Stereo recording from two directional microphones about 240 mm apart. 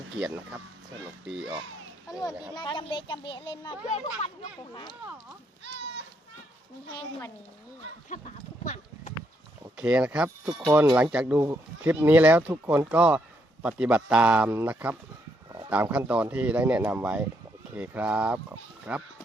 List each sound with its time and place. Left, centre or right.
0.2 s speech: centre
2.6 s a child's voice: centre
8.1 s speech: left
8.6 s a sound: left
9.7 s speech: centre